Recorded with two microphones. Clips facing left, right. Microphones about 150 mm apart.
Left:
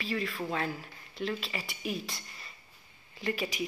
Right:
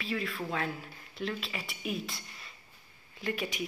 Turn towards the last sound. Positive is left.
turn(degrees=0)  # may be behind; listen again after turning